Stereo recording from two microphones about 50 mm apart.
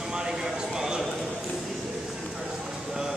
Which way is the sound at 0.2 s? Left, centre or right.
Centre.